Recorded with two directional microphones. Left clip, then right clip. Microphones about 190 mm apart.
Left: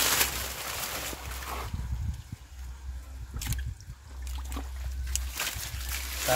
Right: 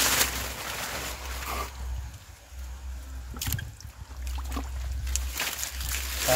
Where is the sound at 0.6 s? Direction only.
60° left (ahead or behind).